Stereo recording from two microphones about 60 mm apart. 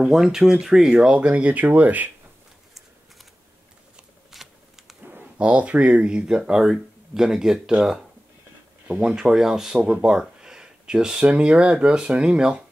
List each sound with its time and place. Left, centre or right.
0.0 s speech: centre
1.1 s speech: right
4.3 s shuffling cards: centre
5.4 s speech: right
9.0 s speech: centre